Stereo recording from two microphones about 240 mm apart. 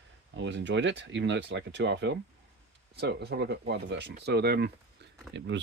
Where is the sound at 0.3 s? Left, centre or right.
Right.